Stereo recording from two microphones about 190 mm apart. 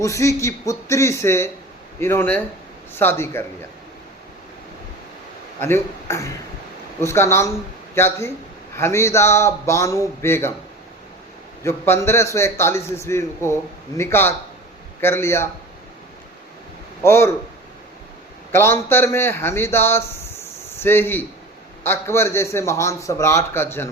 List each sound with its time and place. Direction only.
0.0 s a man's voice: 15° left (ahead or behind)
5.5 s a man's voice: 10° left (ahead or behind)
11.6 s a man's voice: 15° left (ahead or behind)
17.0 s a man's voice: 15° left (ahead or behind)
18.5 s a man's voice: 10° left (ahead or behind)